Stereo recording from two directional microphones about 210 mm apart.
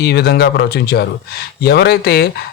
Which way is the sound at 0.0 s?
50° left (ahead or behind).